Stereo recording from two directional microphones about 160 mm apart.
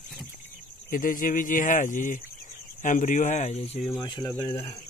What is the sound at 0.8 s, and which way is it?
Speech, 60° left (ahead or behind).